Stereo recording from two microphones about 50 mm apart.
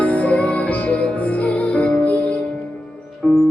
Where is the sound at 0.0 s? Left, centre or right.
Left.